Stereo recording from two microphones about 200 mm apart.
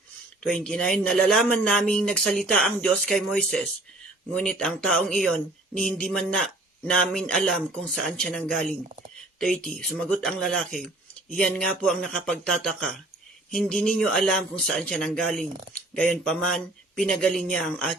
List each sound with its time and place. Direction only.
0.4 s speech: 5° left (ahead or behind)